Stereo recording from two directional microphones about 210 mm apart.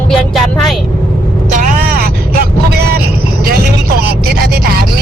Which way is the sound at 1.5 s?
40° right (ahead or behind).